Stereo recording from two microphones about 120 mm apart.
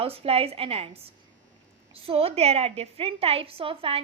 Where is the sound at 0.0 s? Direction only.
55° right (ahead or behind).